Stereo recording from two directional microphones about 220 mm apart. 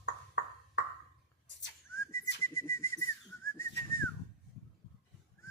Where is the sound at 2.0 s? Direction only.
10° left (ahead or behind).